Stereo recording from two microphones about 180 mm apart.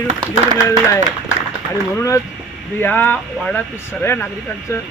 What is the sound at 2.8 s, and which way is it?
Speech, 10° left (ahead or behind).